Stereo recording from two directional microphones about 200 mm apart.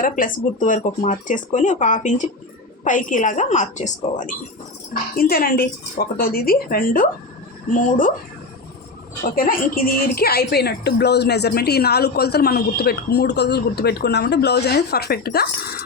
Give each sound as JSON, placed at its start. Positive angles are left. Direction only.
{"t": 0.0, "sound": "a woman's voice", "side_deg": 45}
{"t": 9.2, "sound": "a woman's voice", "side_deg": 45}